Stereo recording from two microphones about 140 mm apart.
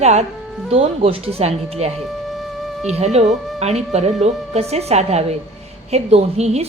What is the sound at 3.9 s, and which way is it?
Speech, 50° right (ahead or behind).